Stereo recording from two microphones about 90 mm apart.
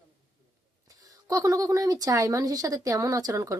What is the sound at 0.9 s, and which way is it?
Speech, 40° right (ahead or behind).